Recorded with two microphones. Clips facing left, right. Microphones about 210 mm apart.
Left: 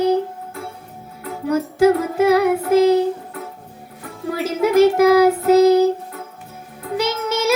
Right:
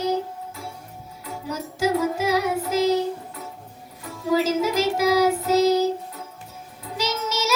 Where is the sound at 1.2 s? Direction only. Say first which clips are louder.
Left 11 dB; 60° left (ahead or behind).